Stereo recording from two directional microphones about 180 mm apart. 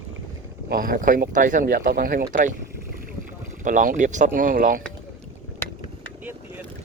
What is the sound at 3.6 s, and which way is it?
Speech, 45° right (ahead or behind).